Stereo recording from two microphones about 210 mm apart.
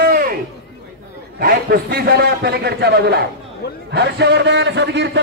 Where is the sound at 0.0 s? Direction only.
45° right (ahead or behind).